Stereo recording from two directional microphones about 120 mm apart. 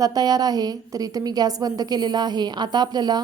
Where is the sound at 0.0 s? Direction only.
30° right (ahead or behind).